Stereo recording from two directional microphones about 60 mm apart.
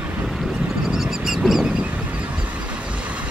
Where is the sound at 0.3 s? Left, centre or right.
Centre.